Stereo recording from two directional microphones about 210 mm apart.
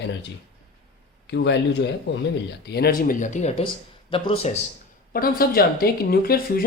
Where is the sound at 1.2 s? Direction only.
55° left (ahead or behind); by 4.5 s 25° left (ahead or behind).